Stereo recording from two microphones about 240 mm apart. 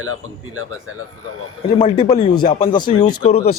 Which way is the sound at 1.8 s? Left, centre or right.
Left.